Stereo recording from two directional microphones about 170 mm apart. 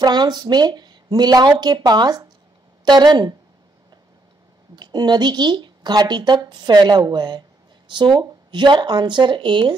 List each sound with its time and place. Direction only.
0.0 s speech: 25° right (ahead or behind)
4.7 s speech: 25° right (ahead or behind)